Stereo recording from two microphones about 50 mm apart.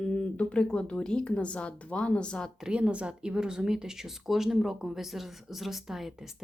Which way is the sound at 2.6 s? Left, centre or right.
Centre.